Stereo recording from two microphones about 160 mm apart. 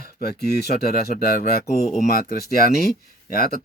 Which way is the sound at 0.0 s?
75° left (ahead or behind).